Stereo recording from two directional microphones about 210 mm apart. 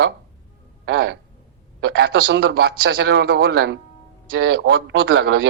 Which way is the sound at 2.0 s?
50° right (ahead or behind).